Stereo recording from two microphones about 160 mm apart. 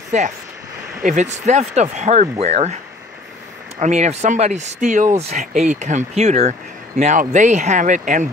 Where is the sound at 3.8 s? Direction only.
45° right (ahead or behind).